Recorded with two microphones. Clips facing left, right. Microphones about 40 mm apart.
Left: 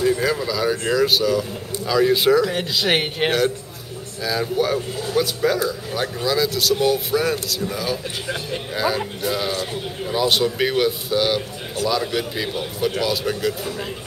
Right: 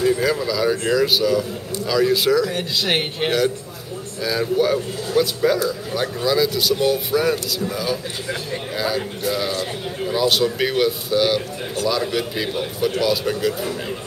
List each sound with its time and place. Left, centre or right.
0.0 s speech: centre
1.9 s speech: centre
4.2 s speech: centre